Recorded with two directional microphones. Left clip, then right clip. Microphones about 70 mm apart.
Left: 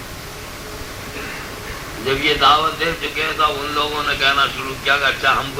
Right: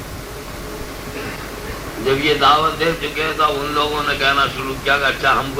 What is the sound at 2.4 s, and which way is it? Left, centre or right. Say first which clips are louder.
A man's voice: even; centre.